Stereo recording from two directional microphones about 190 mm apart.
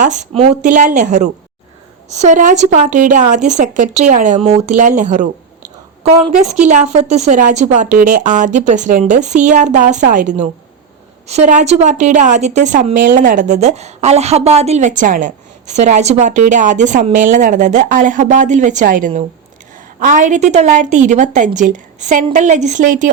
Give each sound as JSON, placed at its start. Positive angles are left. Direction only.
{"t": 0.0, "sound": "a woman's voice", "side_deg": -40}